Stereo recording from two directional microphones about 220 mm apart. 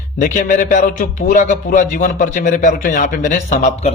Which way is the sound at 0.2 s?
35° left (ahead or behind).